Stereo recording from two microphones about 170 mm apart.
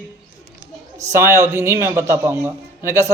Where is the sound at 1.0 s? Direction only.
15° right (ahead or behind).